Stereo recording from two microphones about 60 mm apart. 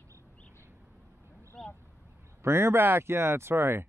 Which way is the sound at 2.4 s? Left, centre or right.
Right.